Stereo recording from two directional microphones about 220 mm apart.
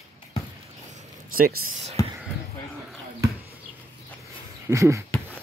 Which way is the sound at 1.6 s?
30° right (ahead or behind).